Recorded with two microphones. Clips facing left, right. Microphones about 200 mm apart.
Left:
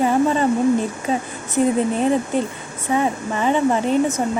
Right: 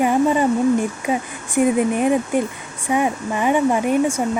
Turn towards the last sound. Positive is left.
turn(degrees=-10)  # may be behind; listen again after turning